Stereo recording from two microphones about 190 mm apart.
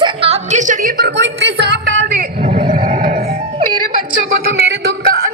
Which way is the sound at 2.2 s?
35° right (ahead or behind).